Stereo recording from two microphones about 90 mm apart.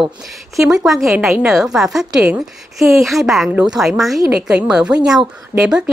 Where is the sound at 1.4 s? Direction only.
5° right (ahead or behind).